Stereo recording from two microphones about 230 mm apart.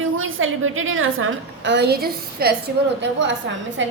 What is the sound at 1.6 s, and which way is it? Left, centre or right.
Speech, right.